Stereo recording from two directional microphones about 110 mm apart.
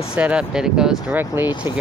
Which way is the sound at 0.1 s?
10° right (ahead or behind).